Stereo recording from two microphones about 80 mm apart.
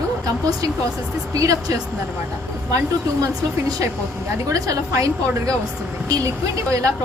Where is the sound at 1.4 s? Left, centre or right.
Right.